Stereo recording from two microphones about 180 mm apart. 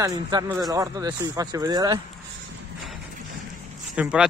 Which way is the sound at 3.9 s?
5° right (ahead or behind).